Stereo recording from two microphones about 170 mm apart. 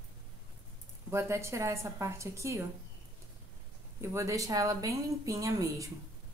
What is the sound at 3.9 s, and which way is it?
Speech, 15° right (ahead or behind).